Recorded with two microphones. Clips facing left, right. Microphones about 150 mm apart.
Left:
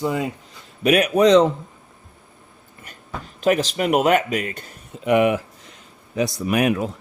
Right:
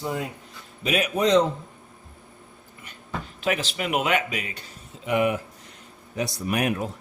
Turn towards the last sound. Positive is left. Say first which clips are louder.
# left 5 dB
turn(degrees=90)